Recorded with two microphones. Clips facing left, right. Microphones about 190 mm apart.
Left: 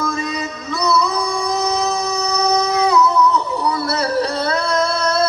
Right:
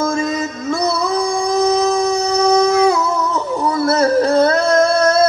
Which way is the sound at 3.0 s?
50° right (ahead or behind).